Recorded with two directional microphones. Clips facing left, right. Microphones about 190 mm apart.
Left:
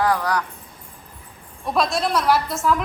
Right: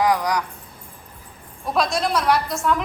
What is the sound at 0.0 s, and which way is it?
Speech, 15° right (ahead or behind).